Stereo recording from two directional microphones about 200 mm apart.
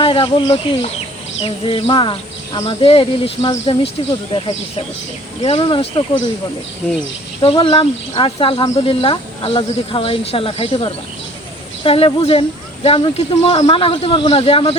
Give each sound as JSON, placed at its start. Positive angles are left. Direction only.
{"t": 0.0, "sound": "speech", "side_deg": 25}
{"t": 7.4, "sound": "speech", "side_deg": 25}